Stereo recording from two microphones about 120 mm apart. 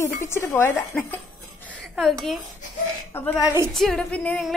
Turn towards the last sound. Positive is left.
turn(degrees=10)  # may be behind; listen again after turning